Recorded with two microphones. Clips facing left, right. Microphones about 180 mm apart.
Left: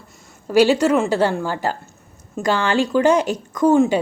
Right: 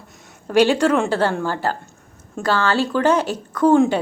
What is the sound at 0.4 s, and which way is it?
Speech, 10° left (ahead or behind).